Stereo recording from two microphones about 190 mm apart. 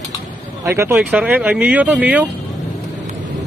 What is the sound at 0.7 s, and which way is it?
Speech, 15° right (ahead or behind).